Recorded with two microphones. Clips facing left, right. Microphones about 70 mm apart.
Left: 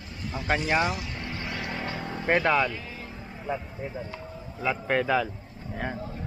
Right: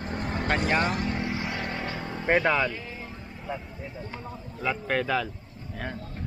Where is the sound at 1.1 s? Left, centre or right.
Centre.